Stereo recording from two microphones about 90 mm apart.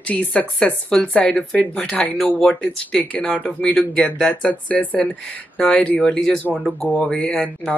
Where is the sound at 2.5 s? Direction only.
15° left (ahead or behind).